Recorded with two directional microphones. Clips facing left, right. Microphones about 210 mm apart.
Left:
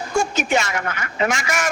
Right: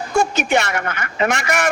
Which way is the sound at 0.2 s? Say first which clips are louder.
Right 3 dB; 60° right (ahead or behind).